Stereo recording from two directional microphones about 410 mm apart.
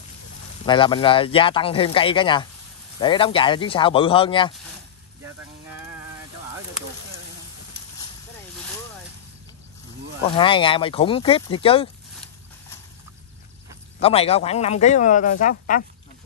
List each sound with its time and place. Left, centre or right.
0.7 s speech: centre
10.3 s speech: centre
13.9 s speech: centre